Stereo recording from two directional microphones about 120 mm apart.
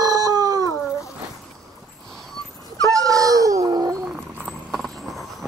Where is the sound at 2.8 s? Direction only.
30° right (ahead or behind).